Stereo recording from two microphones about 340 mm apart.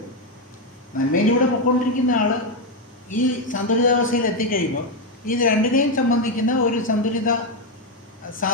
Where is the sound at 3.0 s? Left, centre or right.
Left.